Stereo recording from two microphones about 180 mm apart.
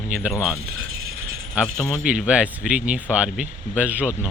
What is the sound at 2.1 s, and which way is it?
Speech, 5° right (ahead or behind).